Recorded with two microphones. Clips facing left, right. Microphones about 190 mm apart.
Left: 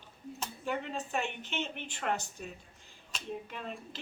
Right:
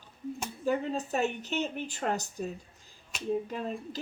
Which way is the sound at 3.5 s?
40° right (ahead or behind).